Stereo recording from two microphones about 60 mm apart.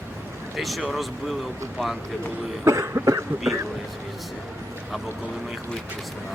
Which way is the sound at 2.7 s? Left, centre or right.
Right.